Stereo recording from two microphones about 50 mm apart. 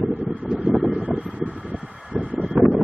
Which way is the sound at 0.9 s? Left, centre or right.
Right.